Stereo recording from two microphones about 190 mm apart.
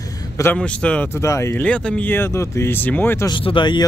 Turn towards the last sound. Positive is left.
turn(degrees=25)  # may be behind; listen again after turning